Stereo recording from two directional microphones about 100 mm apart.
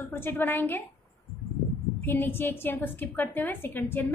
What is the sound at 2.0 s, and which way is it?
A woman's voice, 20° left (ahead or behind).